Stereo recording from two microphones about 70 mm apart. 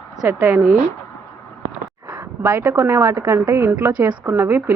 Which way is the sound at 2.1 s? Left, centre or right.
Right.